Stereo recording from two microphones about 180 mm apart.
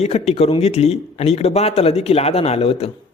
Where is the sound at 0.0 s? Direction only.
35° left (ahead or behind).